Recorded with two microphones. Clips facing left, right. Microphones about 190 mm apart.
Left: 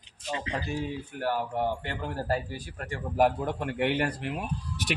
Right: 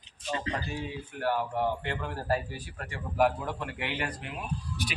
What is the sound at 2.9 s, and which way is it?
Speech, 45° left (ahead or behind).